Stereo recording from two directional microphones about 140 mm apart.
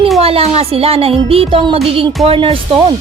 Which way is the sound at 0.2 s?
45° right (ahead or behind).